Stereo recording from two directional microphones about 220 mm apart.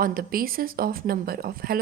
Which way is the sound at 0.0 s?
40° right (ahead or behind).